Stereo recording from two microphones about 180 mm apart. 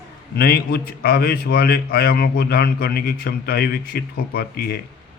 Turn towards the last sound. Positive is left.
turn(degrees=60)  # may be behind; listen again after turning